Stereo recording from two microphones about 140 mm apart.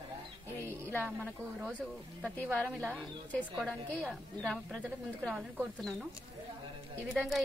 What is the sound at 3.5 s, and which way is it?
Speech, 5° right (ahead or behind).